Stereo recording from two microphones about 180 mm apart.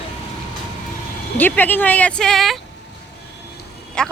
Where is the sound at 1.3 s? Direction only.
10° left (ahead or behind).